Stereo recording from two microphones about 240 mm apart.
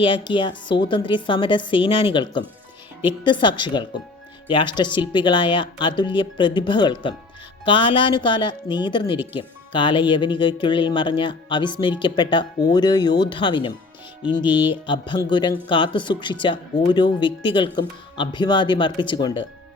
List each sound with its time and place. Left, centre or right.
0.0 s speech: left